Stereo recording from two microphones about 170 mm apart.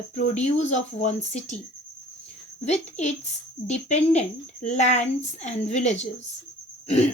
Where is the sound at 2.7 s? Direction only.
40° left (ahead or behind).